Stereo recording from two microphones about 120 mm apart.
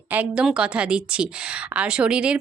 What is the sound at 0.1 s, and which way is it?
A woman's voice, 15° right (ahead or behind).